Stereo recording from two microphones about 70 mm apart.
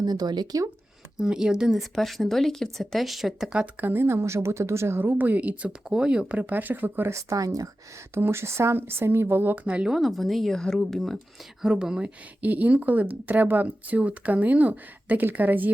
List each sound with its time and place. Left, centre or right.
0.0 s speech: right
1.1 s speech: centre
3.5 s speech: right
7.1 s speech: right
8.1 s speech: right
9.6 s speech: centre
9.9 s speech: centre
11.6 s speech: centre; by 15.7 s right